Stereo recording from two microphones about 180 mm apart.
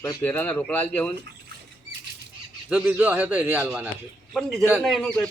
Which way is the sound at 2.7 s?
10° right (ahead or behind).